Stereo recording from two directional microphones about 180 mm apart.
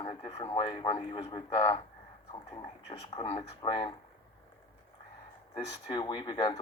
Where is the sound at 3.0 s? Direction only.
35° left (ahead or behind).